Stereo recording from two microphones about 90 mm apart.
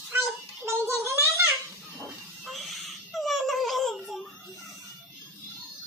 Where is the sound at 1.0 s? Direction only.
30° right (ahead or behind).